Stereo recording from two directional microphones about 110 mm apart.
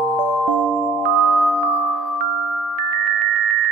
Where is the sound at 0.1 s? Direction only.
15° left (ahead or behind).